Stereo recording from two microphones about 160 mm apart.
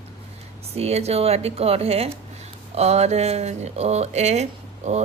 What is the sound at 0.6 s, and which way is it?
Speech, 40° right (ahead or behind).